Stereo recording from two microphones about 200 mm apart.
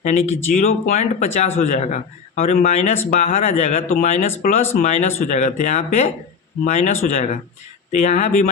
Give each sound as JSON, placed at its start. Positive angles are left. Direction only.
{"t": 0.0, "sound": "speech", "side_deg": 35}